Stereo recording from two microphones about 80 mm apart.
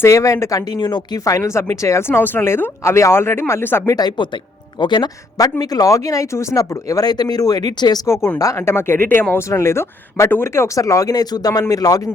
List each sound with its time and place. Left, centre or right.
0.1 s speech: left
0.7 s speech: left
1.2 s speech: left
3.8 s speech: left
4.8 s speech: left
5.4 s speech: left
8.0 s speech: left
9.5 s speech: left